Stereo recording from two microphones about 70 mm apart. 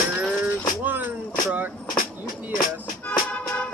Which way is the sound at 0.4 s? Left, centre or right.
Right.